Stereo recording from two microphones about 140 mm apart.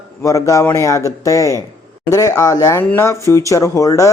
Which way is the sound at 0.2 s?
20° left (ahead or behind).